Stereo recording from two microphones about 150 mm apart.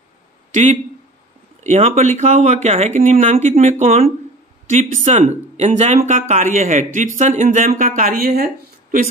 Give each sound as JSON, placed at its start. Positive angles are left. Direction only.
{"t": 0.5, "sound": "speech", "side_deg": -55}